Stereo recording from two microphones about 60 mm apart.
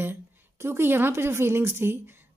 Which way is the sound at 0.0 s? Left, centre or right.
Right.